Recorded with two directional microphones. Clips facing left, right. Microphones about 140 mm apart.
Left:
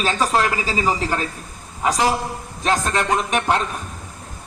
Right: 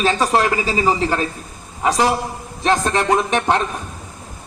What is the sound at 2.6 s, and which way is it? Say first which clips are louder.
Speech: right 3 dB; 25° right (ahead or behind).